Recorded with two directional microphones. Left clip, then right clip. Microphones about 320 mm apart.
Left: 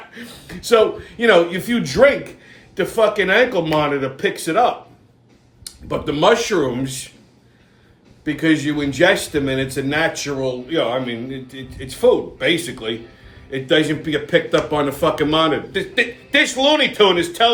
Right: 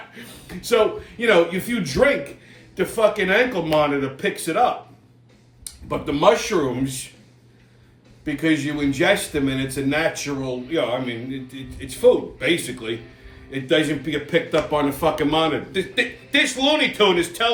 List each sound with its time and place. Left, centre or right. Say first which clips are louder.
0.1 s speech: left 3 dB; centre
5.9 s speech: left 2 dB; centre
8.2 s speech: left 3 dB; centre